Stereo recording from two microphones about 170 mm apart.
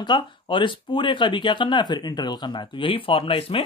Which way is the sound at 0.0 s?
25° left (ahead or behind).